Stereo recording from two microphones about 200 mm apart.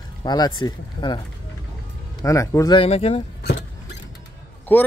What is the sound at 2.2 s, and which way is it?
Speech, 15° left (ahead or behind).